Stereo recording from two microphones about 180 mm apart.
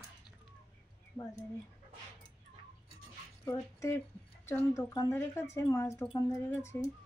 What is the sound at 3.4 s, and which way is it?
Speech, 15° left (ahead or behind).